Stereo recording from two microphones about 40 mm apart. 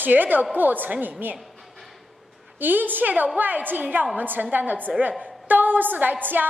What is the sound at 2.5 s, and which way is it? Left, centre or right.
A woman's voice, right.